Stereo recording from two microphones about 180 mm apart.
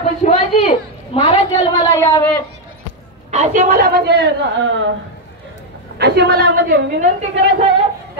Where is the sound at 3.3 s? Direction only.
40° right (ahead or behind); by 4.8 s 70° right (ahead or behind).